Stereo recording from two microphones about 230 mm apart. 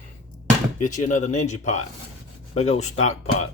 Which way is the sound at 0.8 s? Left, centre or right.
Left.